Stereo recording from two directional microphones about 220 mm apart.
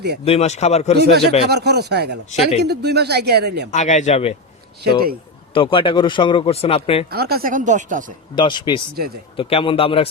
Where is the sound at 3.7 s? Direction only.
35° left (ahead or behind).